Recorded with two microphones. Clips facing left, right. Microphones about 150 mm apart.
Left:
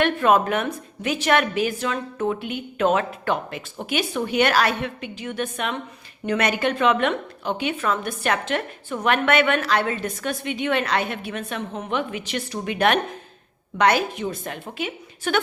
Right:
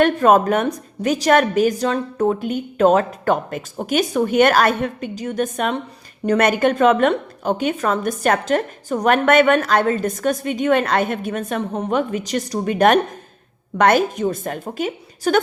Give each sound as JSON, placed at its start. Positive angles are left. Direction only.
{"t": 0.0, "sound": "a woman's voice", "side_deg": -40}